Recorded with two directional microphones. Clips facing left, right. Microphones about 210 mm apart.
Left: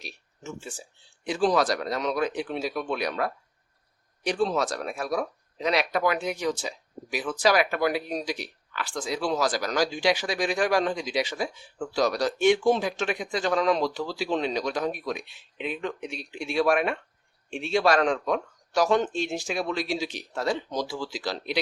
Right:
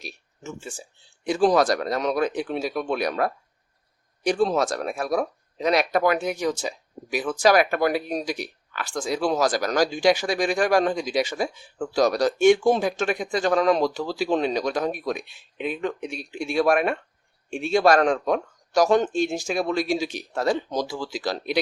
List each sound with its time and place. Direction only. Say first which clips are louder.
1.2 s speech: right 4 dB; 45° right (ahead or behind)